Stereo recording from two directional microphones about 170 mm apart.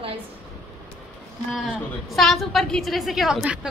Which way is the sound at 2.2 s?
Centre (ahead or behind).